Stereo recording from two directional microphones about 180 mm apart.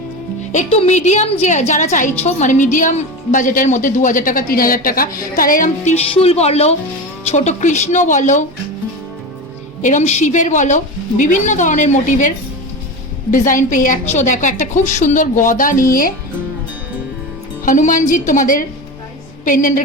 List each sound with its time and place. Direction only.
0.5 s a woman's voice: 40° left (ahead or behind)
9.8 s a woman's voice: 40° left (ahead or behind)
13.3 s a woman's voice: 45° left (ahead or behind)
17.7 s a woman's voice: 45° left (ahead or behind)